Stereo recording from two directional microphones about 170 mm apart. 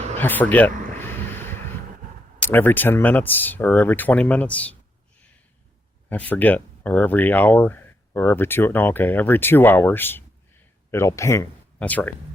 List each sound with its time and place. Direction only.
0.2 s a sound: 10° left (ahead or behind)
2.4 s speech: 10° left (ahead or behind)
6.1 s speech: 10° left (ahead or behind)